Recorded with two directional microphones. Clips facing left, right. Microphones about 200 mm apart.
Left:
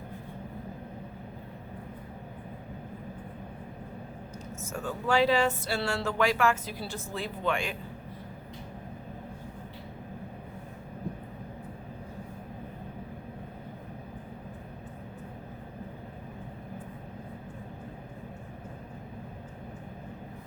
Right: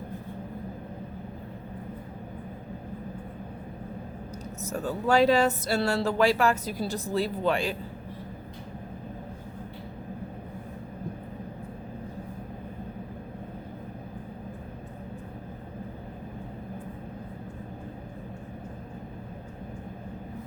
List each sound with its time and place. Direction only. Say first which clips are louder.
4.6 s speech: right 4 dB; 35° right (ahead or behind)